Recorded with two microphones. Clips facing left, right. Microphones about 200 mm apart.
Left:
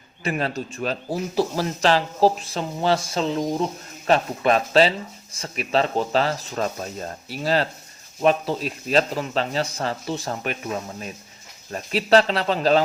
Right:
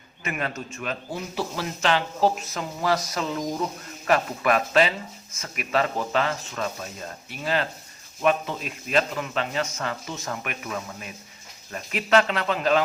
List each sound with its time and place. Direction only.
0.3 s speech: 30° left (ahead or behind)